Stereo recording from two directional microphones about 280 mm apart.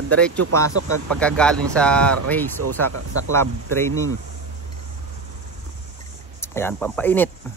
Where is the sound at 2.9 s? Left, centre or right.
Right.